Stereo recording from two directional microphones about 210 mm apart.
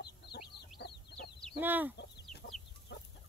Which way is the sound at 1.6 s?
10° right (ahead or behind).